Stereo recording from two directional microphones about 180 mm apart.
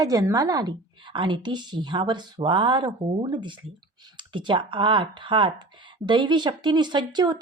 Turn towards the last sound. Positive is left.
turn(degrees=-25)  # may be behind; listen again after turning